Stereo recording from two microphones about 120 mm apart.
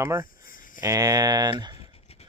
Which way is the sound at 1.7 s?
55° left (ahead or behind).